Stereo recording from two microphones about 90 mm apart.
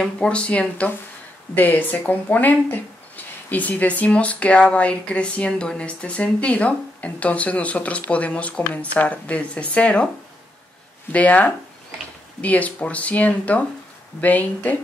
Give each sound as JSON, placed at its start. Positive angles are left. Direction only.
{"t": 0.0, "sound": "speech", "side_deg": 10}
{"t": 11.1, "sound": "speech", "side_deg": 15}